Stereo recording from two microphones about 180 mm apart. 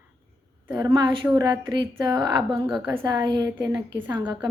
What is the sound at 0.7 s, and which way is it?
A woman's voice, 20° right (ahead or behind).